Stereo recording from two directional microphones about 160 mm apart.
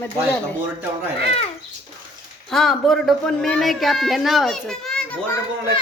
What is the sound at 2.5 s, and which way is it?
Speech, centre (ahead or behind).